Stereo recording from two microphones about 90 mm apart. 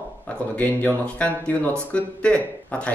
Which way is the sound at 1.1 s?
15° left (ahead or behind).